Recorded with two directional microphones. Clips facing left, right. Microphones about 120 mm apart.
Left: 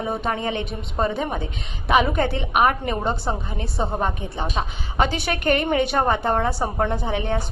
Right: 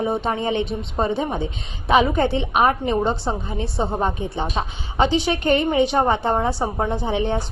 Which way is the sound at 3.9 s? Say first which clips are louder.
Right 2 dB; 30° right (ahead or behind).